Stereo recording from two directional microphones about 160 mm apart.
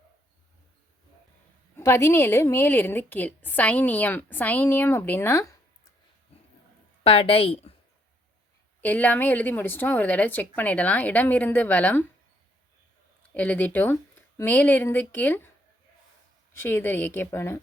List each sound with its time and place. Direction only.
1.7 s a woman's voice: 15° left (ahead or behind)
7.0 s a woman's voice: 35° left (ahead or behind)
8.8 s a woman's voice: 10° left (ahead or behind)
13.3 s a woman's voice: 10° left (ahead or behind)
16.5 s a woman's voice: 15° left (ahead or behind)